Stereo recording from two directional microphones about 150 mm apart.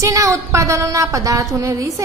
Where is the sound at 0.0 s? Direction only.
20° right (ahead or behind).